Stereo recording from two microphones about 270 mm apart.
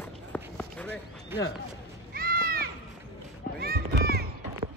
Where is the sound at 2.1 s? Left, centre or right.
Right.